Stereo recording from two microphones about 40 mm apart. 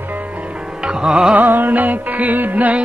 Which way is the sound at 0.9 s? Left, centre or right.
Centre.